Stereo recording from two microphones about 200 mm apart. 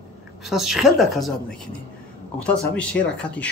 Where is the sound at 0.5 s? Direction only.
Centre (ahead or behind).